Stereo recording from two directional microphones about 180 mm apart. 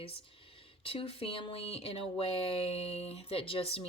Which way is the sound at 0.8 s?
30° left (ahead or behind).